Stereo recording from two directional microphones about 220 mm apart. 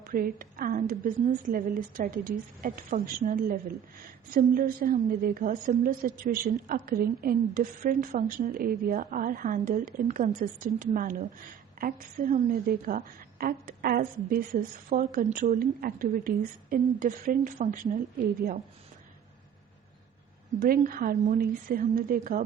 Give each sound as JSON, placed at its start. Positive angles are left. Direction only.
{"t": 0.0, "sound": "a woman's voice", "side_deg": -40}
{"t": 20.6, "sound": "a woman's voice", "side_deg": -40}